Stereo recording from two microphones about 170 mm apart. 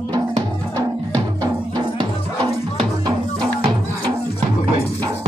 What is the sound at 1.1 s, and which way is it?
Music, 20° right (ahead or behind).